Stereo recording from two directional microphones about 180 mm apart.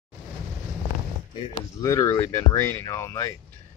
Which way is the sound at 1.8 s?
15° left (ahead or behind).